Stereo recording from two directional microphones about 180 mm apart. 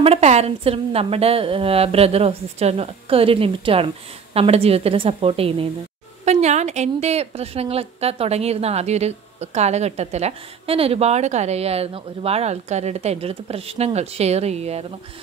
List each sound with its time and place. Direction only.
0.0 s a woman's voice: 35° right (ahead or behind)